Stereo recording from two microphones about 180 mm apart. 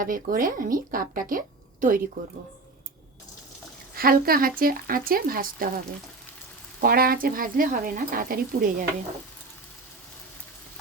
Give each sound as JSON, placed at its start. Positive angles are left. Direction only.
{"t": 0.0, "sound": "speech", "side_deg": -50}
{"t": 3.9, "sound": "speech", "side_deg": -55}
{"t": 6.8, "sound": "speech", "side_deg": -55}